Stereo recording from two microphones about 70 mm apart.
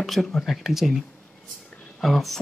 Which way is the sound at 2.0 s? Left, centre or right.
Centre.